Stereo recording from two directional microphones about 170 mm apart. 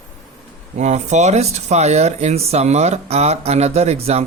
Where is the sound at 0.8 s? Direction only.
45° right (ahead or behind).